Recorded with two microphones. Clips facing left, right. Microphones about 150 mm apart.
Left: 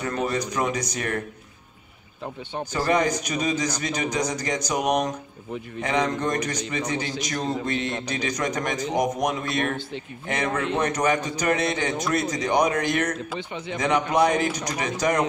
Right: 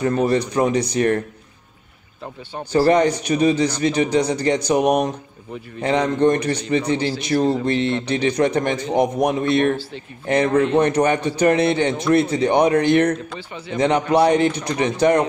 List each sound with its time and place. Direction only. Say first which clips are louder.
0.0 s speech: right 8 dB; 30° right (ahead or behind)
2.7 s a man's voice: right 8 dB; 30° right (ahead or behind)